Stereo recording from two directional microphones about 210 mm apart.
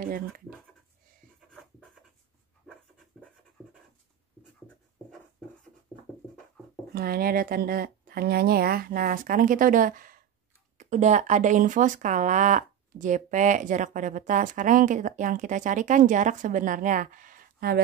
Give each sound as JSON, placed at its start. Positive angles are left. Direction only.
{"t": 6.9, "sound": "speech", "side_deg": -45}